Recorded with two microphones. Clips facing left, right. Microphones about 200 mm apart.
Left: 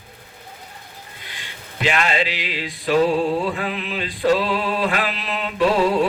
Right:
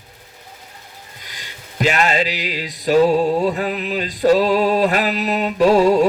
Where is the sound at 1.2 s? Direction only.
40° right (ahead or behind).